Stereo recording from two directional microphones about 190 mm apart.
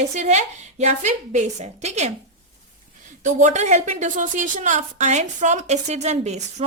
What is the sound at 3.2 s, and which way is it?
A woman's voice, 40° right (ahead or behind).